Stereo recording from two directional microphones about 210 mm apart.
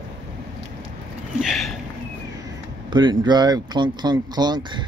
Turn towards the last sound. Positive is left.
turn(degrees=-20)  # may be behind; listen again after turning